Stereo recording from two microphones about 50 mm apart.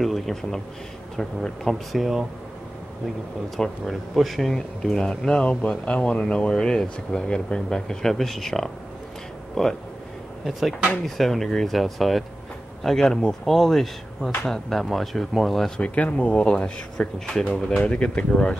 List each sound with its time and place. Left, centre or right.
0.0 s a man's voice: centre
1.9 s speech: centre
3.5 s speech: centre
4.1 s speech: centre
4.6 s speech: centre
5.4 s speech: left; by 9.7 s centre
11.1 s speech: centre
15.8 s speech: left
16.4 s speech: centre